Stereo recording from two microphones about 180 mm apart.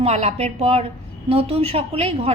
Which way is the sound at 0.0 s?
35° right (ahead or behind).